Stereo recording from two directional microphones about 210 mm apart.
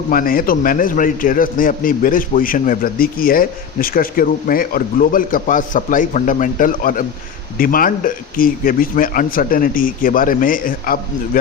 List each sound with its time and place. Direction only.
0.1 s a man's voice: 40° left (ahead or behind)